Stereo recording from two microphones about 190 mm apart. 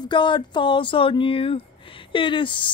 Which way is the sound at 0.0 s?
25° left (ahead or behind).